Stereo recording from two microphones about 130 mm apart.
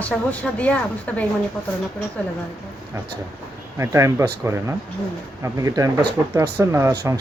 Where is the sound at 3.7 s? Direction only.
25° right (ahead or behind).